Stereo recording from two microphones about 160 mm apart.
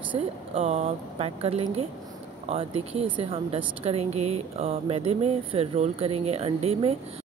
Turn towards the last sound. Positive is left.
turn(degrees=-40)  # may be behind; listen again after turning